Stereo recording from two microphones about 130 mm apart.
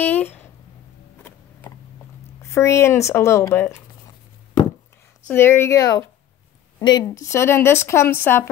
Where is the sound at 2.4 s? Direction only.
20° left (ahead or behind).